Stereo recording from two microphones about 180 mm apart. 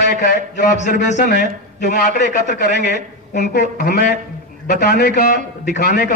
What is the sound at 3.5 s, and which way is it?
A man's voice, 65° left (ahead or behind).